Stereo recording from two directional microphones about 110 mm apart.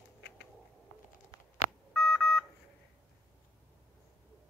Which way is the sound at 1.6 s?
25° left (ahead or behind).